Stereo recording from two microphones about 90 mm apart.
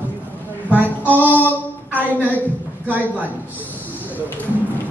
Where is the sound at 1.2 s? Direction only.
20° left (ahead or behind).